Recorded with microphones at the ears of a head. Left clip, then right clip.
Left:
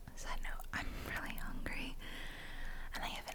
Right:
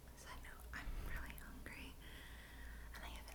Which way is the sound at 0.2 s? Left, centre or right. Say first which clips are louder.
Left 10 dB; left.